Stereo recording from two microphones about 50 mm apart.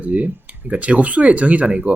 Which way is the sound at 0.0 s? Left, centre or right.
Right.